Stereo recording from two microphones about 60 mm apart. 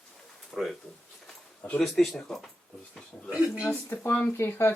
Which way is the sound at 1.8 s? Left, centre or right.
Centre.